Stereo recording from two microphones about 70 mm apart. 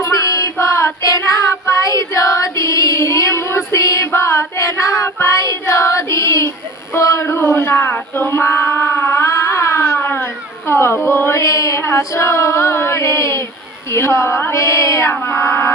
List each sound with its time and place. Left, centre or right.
0.0 s a sound: left
0.5 s child singing: left
6.9 s male singing: left
8.3 s a sound: left
10.7 s speech: left
11.8 s female singing: left
13.9 s a woman's voice: left
14.5 s female singing: left
15.1 s a woman's voice: left